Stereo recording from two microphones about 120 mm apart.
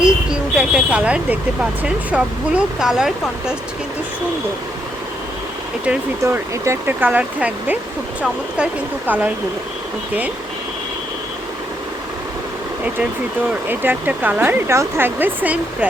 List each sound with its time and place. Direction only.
0.0 s vehicle: 10° right (ahead or behind)
1.8 s speech: 10° right (ahead or behind)
6.2 s speech: 20° right (ahead or behind)
13.7 s speech: 15° right (ahead or behind)